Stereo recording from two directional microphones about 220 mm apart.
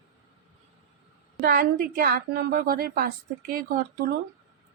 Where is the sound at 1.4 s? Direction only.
40° right (ahead or behind).